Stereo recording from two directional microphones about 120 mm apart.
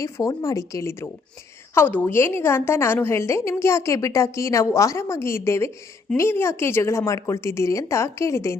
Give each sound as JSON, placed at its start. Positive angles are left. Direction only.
{"t": 0.0, "sound": "a woman's voice", "side_deg": 30}